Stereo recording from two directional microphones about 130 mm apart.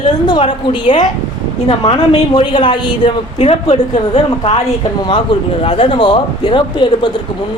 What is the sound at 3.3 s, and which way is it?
A woman's voice, 55° left (ahead or behind).